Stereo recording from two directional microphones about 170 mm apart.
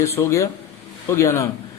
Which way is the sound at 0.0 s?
15° left (ahead or behind).